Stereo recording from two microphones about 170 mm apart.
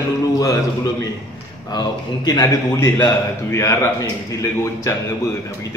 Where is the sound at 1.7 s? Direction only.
25° left (ahead or behind).